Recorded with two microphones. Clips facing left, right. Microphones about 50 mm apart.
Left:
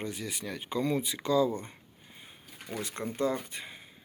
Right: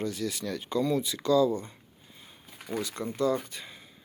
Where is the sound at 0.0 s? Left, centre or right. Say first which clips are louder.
Right 5 dB; left.